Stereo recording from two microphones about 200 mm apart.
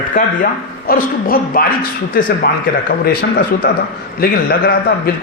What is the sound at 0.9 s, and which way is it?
A man's voice, 45° left (ahead or behind).